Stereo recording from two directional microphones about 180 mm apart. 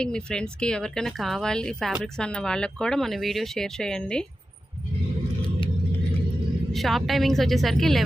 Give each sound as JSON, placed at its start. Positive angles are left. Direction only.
{"t": 0.0, "sound": "speech", "side_deg": 5}
{"t": 6.7, "sound": "speech", "side_deg": 0}